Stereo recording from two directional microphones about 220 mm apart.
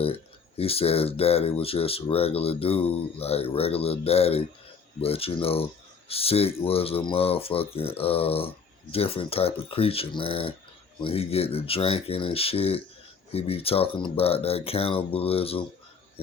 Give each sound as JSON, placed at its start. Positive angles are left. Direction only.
{"t": 0.0, "sound": "speech", "side_deg": 25}